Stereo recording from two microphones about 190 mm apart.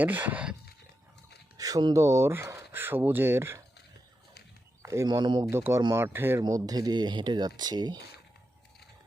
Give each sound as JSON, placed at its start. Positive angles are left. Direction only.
{"t": 0.0, "sound": "speech", "side_deg": -10}
{"t": 1.5, "sound": "speech", "side_deg": -20}
{"t": 4.8, "sound": "speech", "side_deg": -15}